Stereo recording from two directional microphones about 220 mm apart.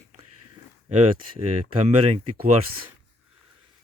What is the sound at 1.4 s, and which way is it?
Speech, 30° right (ahead or behind).